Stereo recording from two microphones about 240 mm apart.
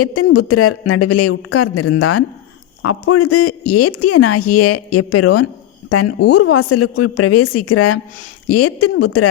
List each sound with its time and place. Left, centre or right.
0.0 s speech: left
6.1 s speech: left
6.4 s speech: left